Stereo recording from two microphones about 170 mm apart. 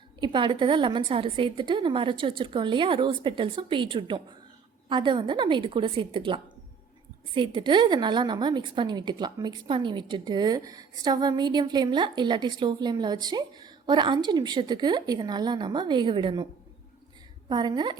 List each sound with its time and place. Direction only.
0.2 s a woman's voice: 30° right (ahead or behind)
17.5 s a woman's voice: 25° right (ahead or behind)